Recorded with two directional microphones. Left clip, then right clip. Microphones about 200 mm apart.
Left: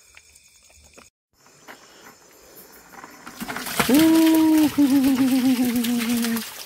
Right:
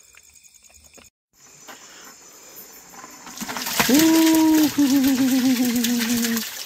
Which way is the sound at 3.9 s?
Centre (ahead or behind).